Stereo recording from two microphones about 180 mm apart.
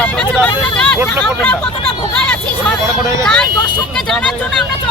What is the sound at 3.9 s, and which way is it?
Speech, 5° left (ahead or behind).